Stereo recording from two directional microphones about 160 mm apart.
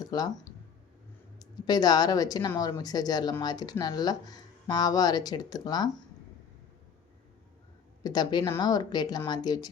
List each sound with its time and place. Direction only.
0.0 s speech: 25° left (ahead or behind)
8.0 s speech: 25° left (ahead or behind)